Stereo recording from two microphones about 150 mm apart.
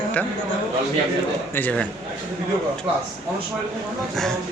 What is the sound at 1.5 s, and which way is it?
Speech, 10° left (ahead or behind).